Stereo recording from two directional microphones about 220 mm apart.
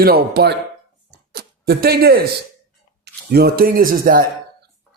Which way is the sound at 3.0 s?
45° right (ahead or behind).